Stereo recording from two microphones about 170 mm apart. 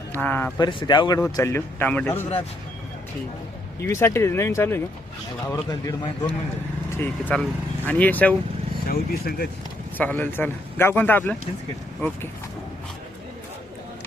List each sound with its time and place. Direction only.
0.1 s speech: 10° left (ahead or behind)
0.6 s a man's voice: 30° left (ahead or behind); by 2.2 s 10° left (ahead or behind)
3.9 s a man's voice: 15° left (ahead or behind)
6.9 s a man's voice: 10° left (ahead or behind)
8.9 s speech: 60° left (ahead or behind)
10.0 s a man's voice: 10° left (ahead or behind)